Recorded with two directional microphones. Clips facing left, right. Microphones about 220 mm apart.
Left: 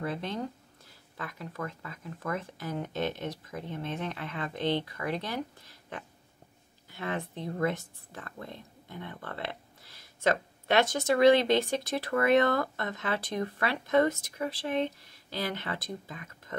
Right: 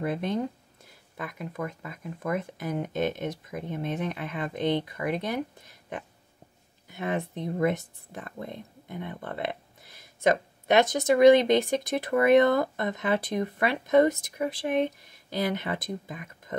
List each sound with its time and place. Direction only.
0.0 s speech: 15° right (ahead or behind)
6.9 s speech: 15° right (ahead or behind)
15.2 s speech: 15° right (ahead or behind)